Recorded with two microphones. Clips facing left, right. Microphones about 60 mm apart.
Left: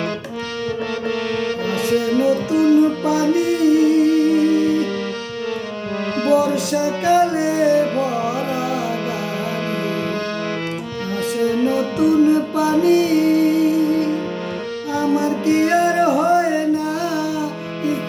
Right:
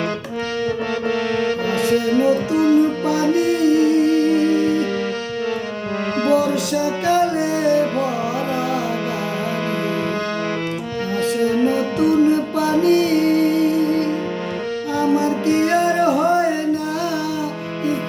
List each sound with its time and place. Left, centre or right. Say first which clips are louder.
2.1 s music: even; right
3.1 s music: even; centre
7.0 s music: left 3 dB; centre
11.5 s music: even; right
12.3 s music: left 1 dB; centre
16.0 s music: left 1 dB; centre